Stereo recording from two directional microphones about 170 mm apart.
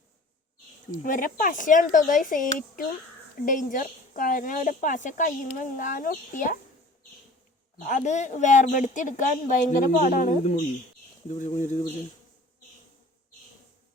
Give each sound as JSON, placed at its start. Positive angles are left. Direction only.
{"t": 0.9, "sound": "speech", "side_deg": 50}
{"t": 7.8, "sound": "speech", "side_deg": 45}